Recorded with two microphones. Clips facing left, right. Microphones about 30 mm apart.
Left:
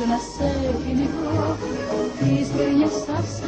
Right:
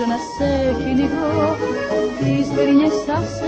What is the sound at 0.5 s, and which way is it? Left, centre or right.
Music, right.